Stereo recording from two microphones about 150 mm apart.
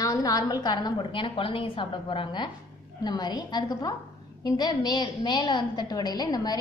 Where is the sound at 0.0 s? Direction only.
25° left (ahead or behind).